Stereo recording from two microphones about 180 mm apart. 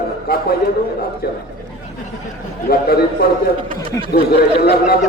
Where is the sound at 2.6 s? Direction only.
60° left (ahead or behind).